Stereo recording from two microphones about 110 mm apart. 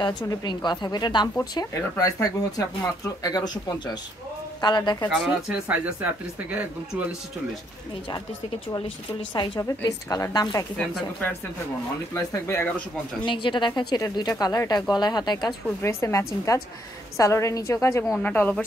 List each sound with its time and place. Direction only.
0.0 s a woman's voice: 40° left (ahead or behind)
5.1 s speech: 5° right (ahead or behind)
9.6 s a woman's voice: 30° left (ahead or behind)
12.1 s a woman's voice: 25° left (ahead or behind)
13.2 s a woman's voice: 45° left (ahead or behind)
15.8 s a woman's voice: 25° left (ahead or behind)